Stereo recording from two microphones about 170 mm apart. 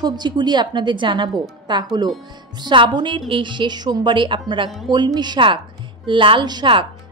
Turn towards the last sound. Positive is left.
turn(degrees=-25)  # may be behind; listen again after turning